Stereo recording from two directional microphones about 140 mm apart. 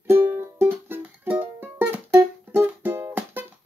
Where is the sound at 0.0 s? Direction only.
15° right (ahead or behind).